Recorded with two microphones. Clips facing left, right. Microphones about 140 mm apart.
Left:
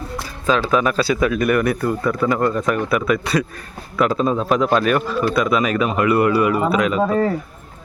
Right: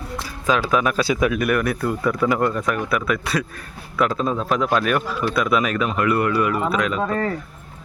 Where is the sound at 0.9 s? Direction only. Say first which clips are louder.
Left 2 dB; 15° right (ahead or behind); by 7.3 s 10° left (ahead or behind).